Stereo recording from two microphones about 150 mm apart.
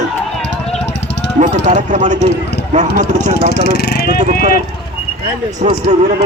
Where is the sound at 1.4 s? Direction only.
55° right (ahead or behind).